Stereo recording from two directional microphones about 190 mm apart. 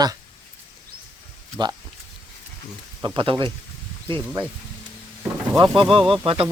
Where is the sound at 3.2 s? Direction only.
25° right (ahead or behind).